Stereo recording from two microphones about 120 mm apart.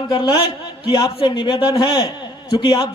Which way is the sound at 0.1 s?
40° left (ahead or behind).